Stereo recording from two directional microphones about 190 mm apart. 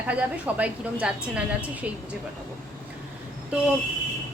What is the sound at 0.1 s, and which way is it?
A woman's voice, 10° right (ahead or behind).